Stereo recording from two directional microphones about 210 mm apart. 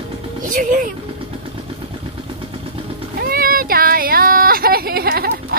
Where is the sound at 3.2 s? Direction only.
45° right (ahead or behind).